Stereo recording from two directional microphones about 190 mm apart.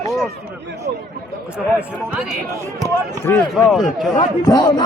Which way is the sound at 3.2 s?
10° left (ahead or behind).